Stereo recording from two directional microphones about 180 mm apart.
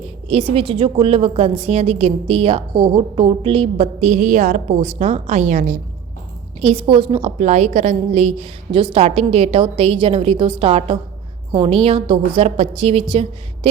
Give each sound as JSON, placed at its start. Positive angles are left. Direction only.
{"t": 0.3, "sound": "a woman's voice", "side_deg": -30}
{"t": 6.6, "sound": "a woman's voice", "side_deg": -35}